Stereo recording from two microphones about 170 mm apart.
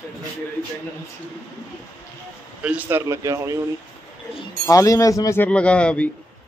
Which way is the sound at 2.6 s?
10° right (ahead or behind).